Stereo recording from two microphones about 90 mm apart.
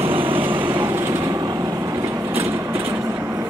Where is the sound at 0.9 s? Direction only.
30° right (ahead or behind).